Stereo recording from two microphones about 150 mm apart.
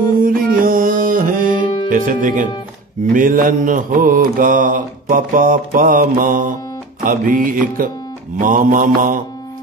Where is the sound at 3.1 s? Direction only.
65° right (ahead or behind).